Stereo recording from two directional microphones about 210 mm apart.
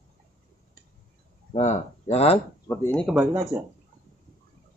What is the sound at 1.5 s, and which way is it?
Speech, 30° left (ahead or behind).